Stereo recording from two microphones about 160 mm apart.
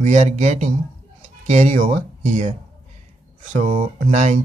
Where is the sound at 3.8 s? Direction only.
55° right (ahead or behind).